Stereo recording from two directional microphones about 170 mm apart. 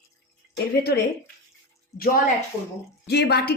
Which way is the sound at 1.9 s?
55° left (ahead or behind).